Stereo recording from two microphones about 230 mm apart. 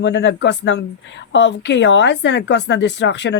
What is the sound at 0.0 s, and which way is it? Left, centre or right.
Speech, left.